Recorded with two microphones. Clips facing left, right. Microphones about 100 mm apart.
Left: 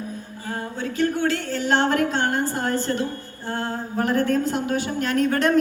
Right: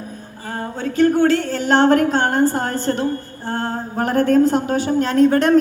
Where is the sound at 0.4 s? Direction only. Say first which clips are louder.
Right 4 dB; 35° right (ahead or behind).